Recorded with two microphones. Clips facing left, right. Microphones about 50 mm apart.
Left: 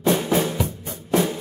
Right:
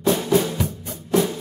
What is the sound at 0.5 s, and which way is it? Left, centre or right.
Music, centre.